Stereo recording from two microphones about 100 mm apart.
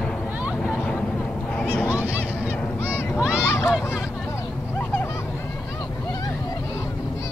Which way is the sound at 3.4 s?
30° left (ahead or behind).